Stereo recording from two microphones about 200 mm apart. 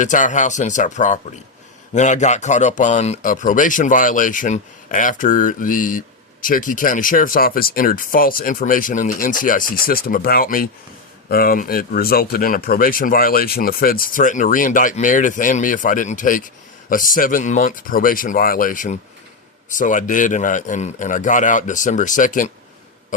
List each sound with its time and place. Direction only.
0.0 s a man's voice: 40° left (ahead or behind)